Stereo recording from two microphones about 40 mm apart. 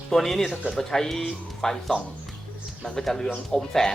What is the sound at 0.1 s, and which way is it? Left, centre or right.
A man's voice, centre.